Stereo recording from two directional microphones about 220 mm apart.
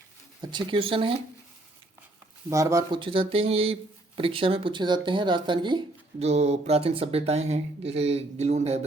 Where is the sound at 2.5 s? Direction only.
15° right (ahead or behind).